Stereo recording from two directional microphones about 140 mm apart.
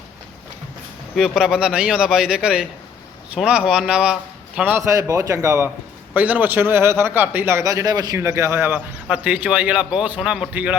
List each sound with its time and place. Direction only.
1.4 s a man's voice: 5° right (ahead or behind)
4.9 s a man's voice: 25° right (ahead or behind)